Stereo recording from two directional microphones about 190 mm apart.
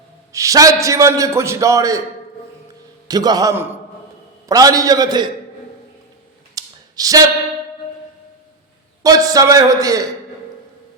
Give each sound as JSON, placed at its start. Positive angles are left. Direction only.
{"t": 0.3, "sound": "a man's voice", "side_deg": -15}
{"t": 3.1, "sound": "a man's voice", "side_deg": -20}
{"t": 6.5, "sound": "a sound", "side_deg": -20}
{"t": 9.0, "sound": "a man's voice", "side_deg": -20}